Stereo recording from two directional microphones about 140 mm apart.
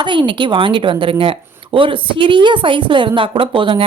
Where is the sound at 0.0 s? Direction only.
35° right (ahead or behind).